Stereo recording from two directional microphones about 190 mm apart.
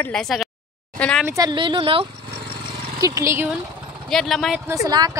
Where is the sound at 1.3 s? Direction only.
20° right (ahead or behind).